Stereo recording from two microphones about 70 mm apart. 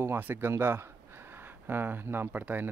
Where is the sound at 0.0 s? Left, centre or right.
Right.